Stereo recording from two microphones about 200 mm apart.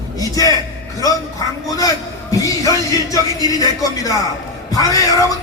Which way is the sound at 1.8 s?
15° left (ahead or behind).